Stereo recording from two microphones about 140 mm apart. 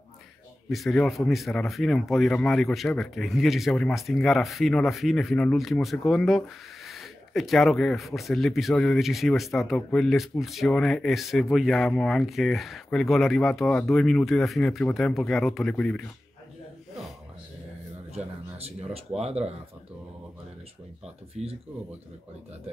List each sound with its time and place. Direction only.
0.7 s speech: centre (ahead or behind)
18.1 s speech: 45° right (ahead or behind)
21.4 s speech: 55° right (ahead or behind)